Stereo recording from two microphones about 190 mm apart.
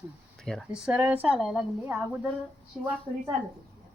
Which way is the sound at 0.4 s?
Centre (ahead or behind).